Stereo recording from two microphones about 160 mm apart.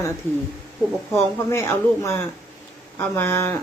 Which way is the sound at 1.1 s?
15° left (ahead or behind).